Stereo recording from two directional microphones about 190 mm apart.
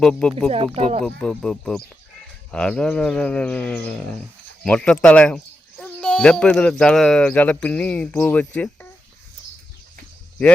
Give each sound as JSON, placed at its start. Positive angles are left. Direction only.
{"t": 0.0, "sound": "speech", "side_deg": 5}
{"t": 0.8, "sound": "speech", "side_deg": -30}
{"t": 1.0, "sound": "speech", "side_deg": 5}